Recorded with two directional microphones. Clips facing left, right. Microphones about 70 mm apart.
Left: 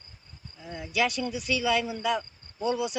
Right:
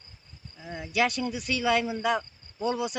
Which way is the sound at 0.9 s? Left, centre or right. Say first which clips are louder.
Right 1 dB; right.